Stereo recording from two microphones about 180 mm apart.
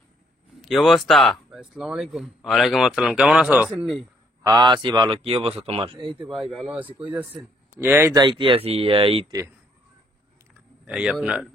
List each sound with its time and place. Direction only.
0.6 s speech: centre (ahead or behind)
4.4 s speech: 25° right (ahead or behind)
6.0 s speech: centre (ahead or behind)
8.4 s speech: 30° right (ahead or behind)
10.9 s speech: 5° right (ahead or behind)